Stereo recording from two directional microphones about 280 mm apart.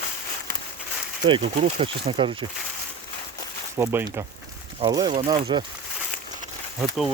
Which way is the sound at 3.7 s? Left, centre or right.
Centre.